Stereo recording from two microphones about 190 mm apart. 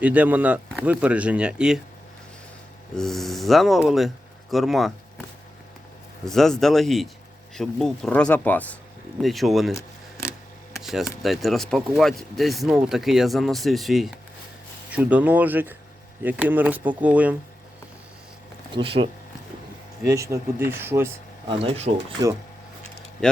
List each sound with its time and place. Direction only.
0.0 s speech: 10° right (ahead or behind)
2.9 s speech: centre (ahead or behind)
6.2 s speech: centre (ahead or behind)
9.7 s camera: 15° left (ahead or behind)
10.8 s speech: centre (ahead or behind)
18.8 s speech: 30° right (ahead or behind)
20.1 s speech: 15° right (ahead or behind)
21.6 s speech: 30° right (ahead or behind)
23.2 s speech: 5° left (ahead or behind)